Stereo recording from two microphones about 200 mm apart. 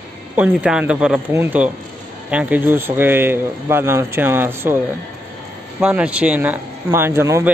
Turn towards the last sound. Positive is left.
turn(degrees=-15)  # may be behind; listen again after turning